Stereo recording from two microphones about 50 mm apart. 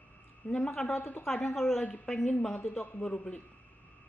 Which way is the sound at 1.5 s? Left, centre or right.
Centre.